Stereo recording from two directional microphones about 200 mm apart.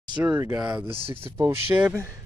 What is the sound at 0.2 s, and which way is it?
Speech, 10° right (ahead or behind).